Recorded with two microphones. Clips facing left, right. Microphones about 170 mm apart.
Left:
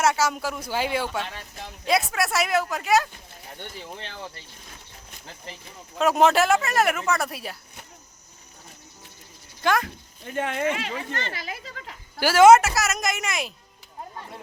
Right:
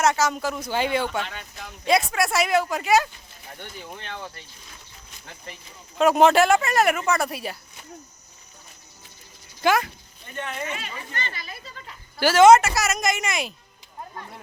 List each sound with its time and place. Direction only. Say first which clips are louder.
0.0 s speech: right 1 dB; 5° left (ahead or behind)
1.3 s speech: even; 30° left (ahead or behind)
1.8 s speech: right 2 dB; 5° left (ahead or behind)
3.6 s speech: left 1 dB; 30° left (ahead or behind)
6.0 s speech: right 3 dB; centre (ahead or behind)
9.6 s speech: right 2 dB; 5° right (ahead or behind)
10.2 s speech: left 6 dB; 90° left
12.2 s speech: even; 10° left (ahead or behind)